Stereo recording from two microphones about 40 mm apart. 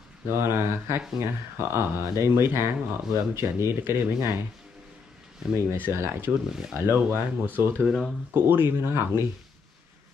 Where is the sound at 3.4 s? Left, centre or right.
Right.